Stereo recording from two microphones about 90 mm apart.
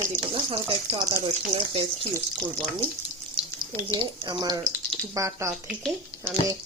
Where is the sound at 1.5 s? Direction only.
85° right.